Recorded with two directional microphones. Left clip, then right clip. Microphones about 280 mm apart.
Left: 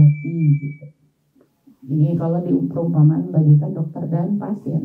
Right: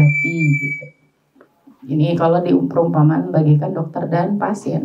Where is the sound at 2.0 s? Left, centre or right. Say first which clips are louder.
Right 8 dB; centre.